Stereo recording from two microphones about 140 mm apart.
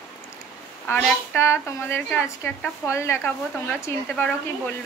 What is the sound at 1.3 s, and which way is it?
Speech, 20° left (ahead or behind).